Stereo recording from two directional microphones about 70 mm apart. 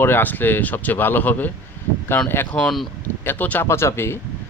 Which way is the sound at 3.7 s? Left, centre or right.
Left.